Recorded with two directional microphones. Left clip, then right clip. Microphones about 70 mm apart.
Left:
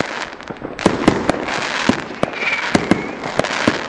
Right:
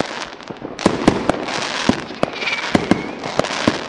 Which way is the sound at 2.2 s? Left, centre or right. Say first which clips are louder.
Left 1 dB; right.